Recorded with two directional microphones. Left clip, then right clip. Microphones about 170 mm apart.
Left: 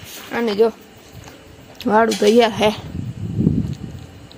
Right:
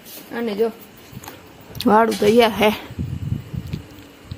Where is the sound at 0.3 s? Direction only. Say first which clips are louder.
Left 5 dB; 40° left (ahead or behind).